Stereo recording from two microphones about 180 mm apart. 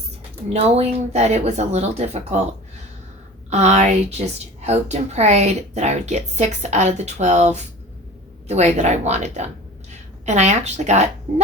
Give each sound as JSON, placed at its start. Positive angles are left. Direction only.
{"t": 0.5, "sound": "a woman's voice", "side_deg": -35}
{"t": 3.5, "sound": "a woman's voice", "side_deg": -40}